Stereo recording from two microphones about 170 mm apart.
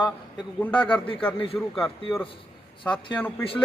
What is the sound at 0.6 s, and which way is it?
A man's voice, 10° left (ahead or behind).